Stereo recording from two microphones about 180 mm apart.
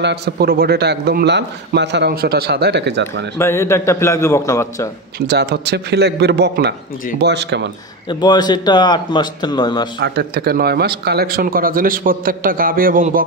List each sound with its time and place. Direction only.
0.0 s a man's voice: 65° right (ahead or behind)
3.3 s a man's voice: 15° left (ahead or behind)
5.2 s a man's voice: 65° right (ahead or behind)
8.1 s a man's voice: 25° left (ahead or behind)
9.9 s speech: 65° right (ahead or behind); by 13.2 s 50° right (ahead or behind)